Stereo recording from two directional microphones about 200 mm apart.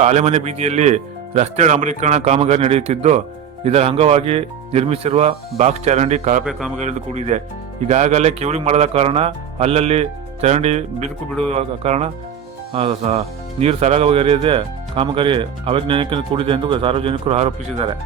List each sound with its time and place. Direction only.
0.0 s speech: 35° right (ahead or behind)
6.4 s a man's voice: centre (ahead or behind)
6.7 s speech: 35° right (ahead or behind)